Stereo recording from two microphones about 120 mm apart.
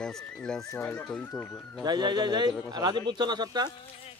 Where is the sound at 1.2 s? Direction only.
20° left (ahead or behind).